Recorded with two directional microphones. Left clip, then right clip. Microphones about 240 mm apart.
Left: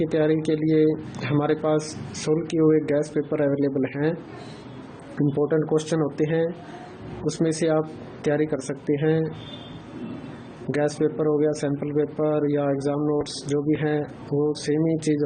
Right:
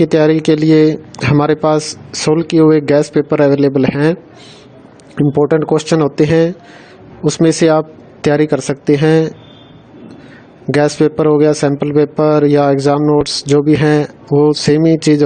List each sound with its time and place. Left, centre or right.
0.0 s a man's voice: right
5.1 s a man's voice: right
10.7 s a man's voice: right